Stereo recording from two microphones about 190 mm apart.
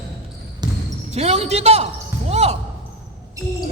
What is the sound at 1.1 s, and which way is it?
Speech, 35° right (ahead or behind).